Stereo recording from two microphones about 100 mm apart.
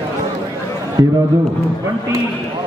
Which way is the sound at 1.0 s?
40° right (ahead or behind).